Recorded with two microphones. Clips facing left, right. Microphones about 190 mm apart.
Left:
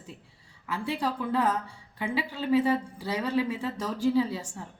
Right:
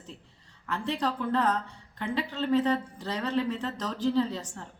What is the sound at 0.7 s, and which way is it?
A woman's voice, 10° left (ahead or behind).